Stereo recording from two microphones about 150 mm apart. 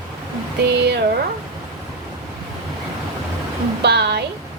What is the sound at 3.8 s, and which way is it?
Speech, 90° right.